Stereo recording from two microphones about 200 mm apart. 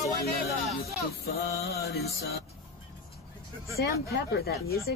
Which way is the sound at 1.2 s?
55° left (ahead or behind).